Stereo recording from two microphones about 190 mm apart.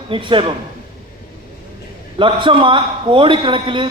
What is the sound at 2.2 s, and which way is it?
A man's voice, 25° right (ahead or behind).